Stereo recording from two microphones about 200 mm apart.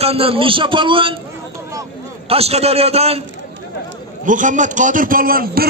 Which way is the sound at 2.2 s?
30° right (ahead or behind).